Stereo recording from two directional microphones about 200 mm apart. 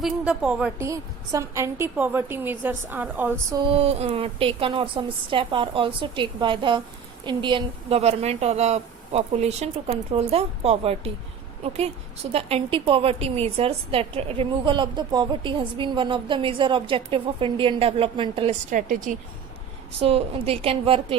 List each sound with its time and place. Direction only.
0.0 s a woman's voice: 5° right (ahead or behind)
3.7 s a woman's voice: 30° right (ahead or behind)
12.3 s a woman's voice: 30° right (ahead or behind)
18.7 s a woman's voice: 40° right (ahead or behind)
20.0 s a woman's voice: 30° right (ahead or behind)